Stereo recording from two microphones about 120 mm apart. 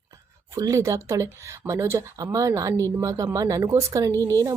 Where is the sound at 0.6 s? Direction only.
25° right (ahead or behind).